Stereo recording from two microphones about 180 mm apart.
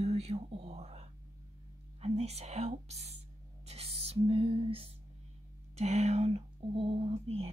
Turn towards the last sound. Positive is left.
turn(degrees=-35)  # may be behind; listen again after turning